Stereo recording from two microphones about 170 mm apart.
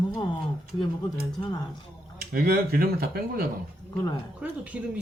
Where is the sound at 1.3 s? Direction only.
25° left (ahead or behind).